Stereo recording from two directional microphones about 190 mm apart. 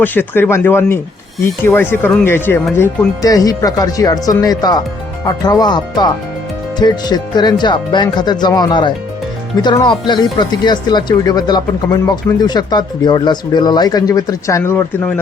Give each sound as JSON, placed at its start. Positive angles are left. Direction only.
{"t": 0.0, "sound": "speech", "side_deg": 10}